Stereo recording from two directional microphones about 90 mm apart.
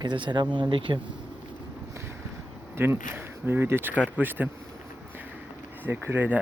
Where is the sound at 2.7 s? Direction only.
25° right (ahead or behind).